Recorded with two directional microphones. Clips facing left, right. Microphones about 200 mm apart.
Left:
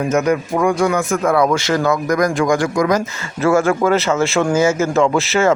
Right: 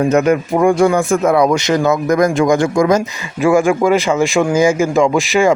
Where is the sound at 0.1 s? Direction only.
30° right (ahead or behind).